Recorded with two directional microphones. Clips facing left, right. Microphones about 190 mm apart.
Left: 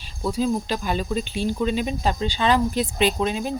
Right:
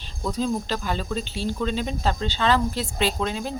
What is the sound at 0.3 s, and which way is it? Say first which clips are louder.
Speech: left 2 dB; 10° left (ahead or behind).